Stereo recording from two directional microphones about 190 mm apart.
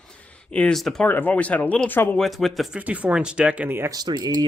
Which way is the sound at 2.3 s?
Centre (ahead or behind).